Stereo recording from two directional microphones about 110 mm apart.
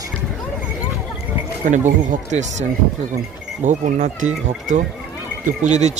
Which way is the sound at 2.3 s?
90° right.